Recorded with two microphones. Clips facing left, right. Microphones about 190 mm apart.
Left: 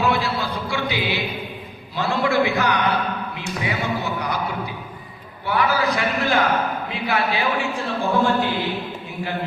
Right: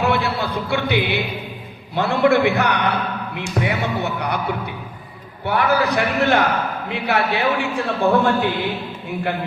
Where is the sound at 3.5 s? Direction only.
60° right (ahead or behind).